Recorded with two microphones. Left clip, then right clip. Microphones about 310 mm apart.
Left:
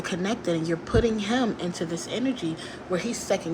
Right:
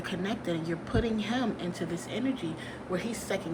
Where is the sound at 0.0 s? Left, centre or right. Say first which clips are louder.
Left 6 dB; centre.